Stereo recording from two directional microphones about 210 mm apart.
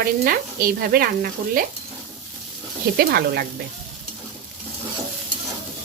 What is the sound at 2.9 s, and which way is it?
Sizzle, 45° right (ahead or behind).